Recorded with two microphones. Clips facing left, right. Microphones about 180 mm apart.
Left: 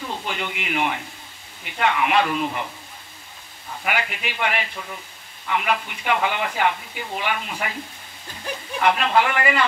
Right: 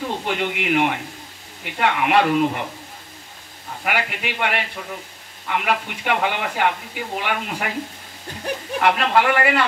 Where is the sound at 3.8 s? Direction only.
65° right (ahead or behind).